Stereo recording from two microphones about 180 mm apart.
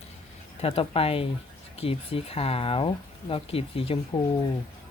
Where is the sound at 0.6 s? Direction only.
30° left (ahead or behind).